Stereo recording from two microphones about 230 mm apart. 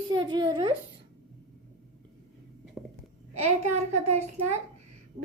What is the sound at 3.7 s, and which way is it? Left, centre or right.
Speech, right.